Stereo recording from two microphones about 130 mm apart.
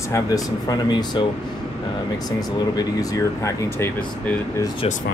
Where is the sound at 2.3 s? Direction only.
30° left (ahead or behind).